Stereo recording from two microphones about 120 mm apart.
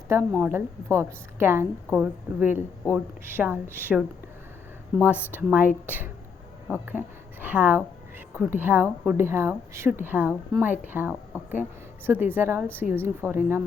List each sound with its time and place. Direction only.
0.1 s a woman's voice: 20° right (ahead or behind)
5.0 s a woman's voice: 15° right (ahead or behind)